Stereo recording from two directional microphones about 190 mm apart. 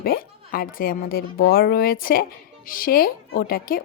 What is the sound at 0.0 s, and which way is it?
Speech, 50° left (ahead or behind).